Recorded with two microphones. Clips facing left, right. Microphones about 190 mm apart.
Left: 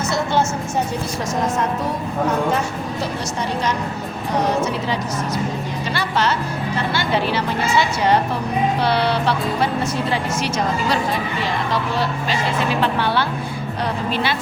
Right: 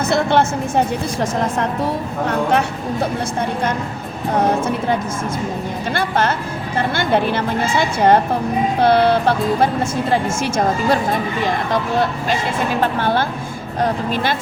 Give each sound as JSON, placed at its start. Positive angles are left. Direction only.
{"t": 0.1, "sound": "music", "side_deg": -60}
{"t": 1.2, "sound": "a woman's voice", "side_deg": -55}
{"t": 2.5, "sound": "speech", "side_deg": -65}
{"t": 4.4, "sound": "speech", "side_deg": -55}